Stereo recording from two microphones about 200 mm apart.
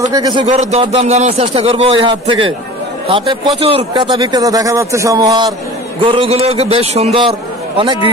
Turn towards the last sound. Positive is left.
turn(degrees=-25)  # may be behind; listen again after turning